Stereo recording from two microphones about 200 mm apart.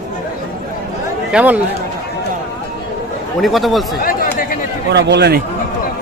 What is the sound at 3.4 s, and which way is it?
Speech, centre (ahead or behind).